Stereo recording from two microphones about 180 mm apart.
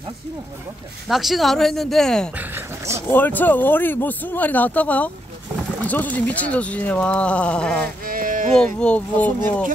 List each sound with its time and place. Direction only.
1.0 s speech: centre (ahead or behind)
2.3 s speech: 15° right (ahead or behind)
3.1 s speech: 10° left (ahead or behind)
8.0 s music: 50° right (ahead or behind)
8.7 s speech: 5° left (ahead or behind)